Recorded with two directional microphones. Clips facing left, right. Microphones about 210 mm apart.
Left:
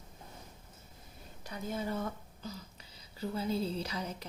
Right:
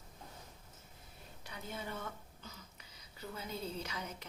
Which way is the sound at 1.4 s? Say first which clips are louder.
Left 8 dB; 40° left (ahead or behind).